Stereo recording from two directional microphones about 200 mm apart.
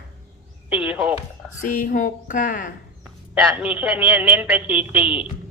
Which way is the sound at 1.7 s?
45° left (ahead or behind).